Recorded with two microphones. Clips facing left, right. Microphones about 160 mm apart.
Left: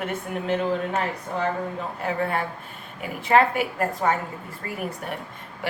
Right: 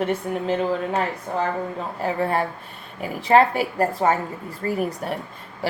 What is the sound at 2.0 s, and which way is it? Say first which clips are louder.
Speech: right 4 dB; 35° right (ahead or behind).